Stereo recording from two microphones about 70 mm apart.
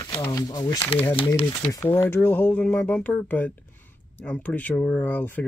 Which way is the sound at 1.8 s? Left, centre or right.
Left.